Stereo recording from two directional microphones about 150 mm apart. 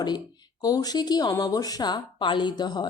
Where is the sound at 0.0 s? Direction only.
30° left (ahead or behind).